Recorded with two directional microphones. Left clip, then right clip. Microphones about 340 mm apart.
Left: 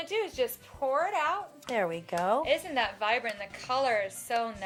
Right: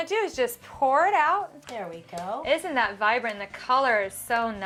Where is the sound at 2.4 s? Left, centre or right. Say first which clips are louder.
Right 4 dB; right.